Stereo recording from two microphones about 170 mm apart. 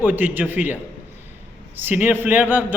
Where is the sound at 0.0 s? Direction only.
10° right (ahead or behind).